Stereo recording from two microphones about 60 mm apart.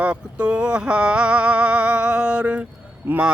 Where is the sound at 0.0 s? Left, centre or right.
Centre.